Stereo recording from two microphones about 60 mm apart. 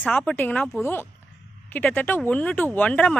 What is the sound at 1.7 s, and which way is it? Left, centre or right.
Speech, left.